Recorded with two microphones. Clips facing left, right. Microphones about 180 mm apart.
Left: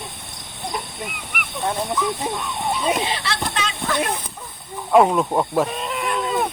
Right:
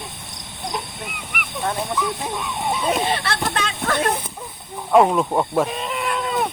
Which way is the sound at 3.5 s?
55° right (ahead or behind).